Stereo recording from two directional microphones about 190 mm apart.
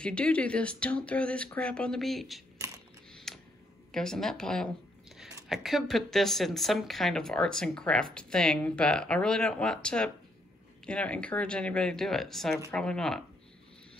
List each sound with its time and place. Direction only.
0.0 s speech: 5° left (ahead or behind)
3.1 s a sound: centre (ahead or behind)
3.9 s speech: 5° left (ahead or behind)